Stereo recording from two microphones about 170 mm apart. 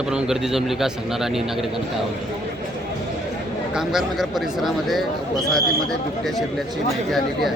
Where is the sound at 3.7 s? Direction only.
Centre (ahead or behind).